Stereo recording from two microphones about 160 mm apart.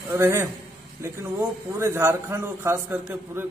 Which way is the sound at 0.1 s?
15° right (ahead or behind).